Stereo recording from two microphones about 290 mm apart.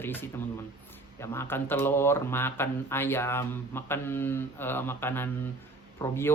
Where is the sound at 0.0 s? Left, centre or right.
Centre.